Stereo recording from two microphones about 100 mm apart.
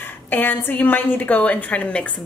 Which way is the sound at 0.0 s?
20° left (ahead or behind).